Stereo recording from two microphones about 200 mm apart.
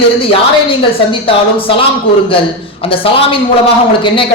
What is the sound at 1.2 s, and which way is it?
Speech, 25° left (ahead or behind).